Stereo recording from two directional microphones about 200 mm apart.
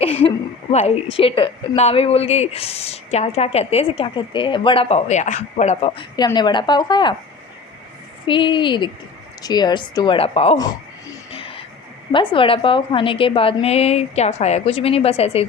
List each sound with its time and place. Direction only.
0.0 s a woman's voice: 30° left (ahead or behind)
8.3 s a woman's voice: 25° left (ahead or behind)
11.3 s music: 25° left (ahead or behind)
12.1 s a woman's voice: 25° left (ahead or behind)